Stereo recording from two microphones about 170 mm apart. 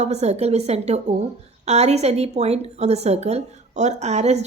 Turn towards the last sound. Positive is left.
turn(degrees=-40)  # may be behind; listen again after turning